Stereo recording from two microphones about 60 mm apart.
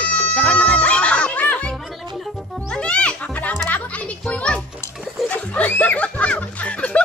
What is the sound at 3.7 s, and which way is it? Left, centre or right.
Children playing, left.